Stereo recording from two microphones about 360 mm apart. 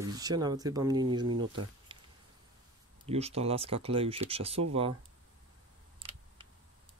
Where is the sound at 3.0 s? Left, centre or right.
Centre.